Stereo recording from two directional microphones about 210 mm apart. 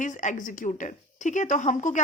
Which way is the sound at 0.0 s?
35° left (ahead or behind).